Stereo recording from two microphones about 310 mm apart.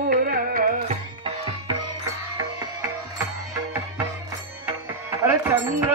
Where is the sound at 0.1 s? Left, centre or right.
Right.